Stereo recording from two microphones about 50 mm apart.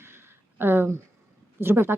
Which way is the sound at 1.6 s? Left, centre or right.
Right.